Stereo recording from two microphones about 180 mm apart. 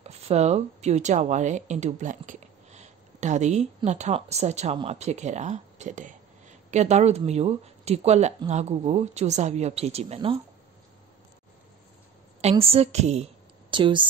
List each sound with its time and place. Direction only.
0.0 s speech: 35° right (ahead or behind)
12.4 s a woman's voice: 35° right (ahead or behind)